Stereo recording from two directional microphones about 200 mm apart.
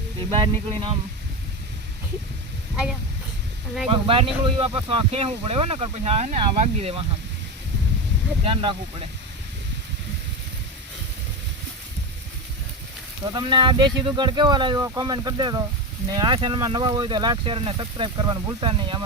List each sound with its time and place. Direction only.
0.2 s speech: 25° right (ahead or behind)
3.8 s speech: 25° right (ahead or behind)
8.4 s speech: 25° right (ahead or behind)
13.3 s speech: 25° right (ahead or behind)